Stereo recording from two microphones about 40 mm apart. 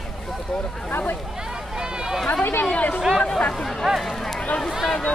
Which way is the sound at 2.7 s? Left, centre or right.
Left.